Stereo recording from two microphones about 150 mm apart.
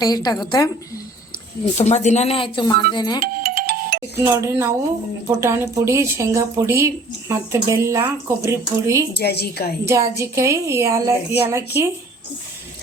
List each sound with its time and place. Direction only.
0.0 s a woman's voice: 25° left (ahead or behind)
1.8 s a woman's voice: 50° left (ahead or behind); by 3.2 s 30° left (ahead or behind)
3.2 s music: 90° right
4.3 s speech: 20° right (ahead or behind)
9.1 s a woman's voice: 90° left
9.8 s speech: 20° right (ahead or behind)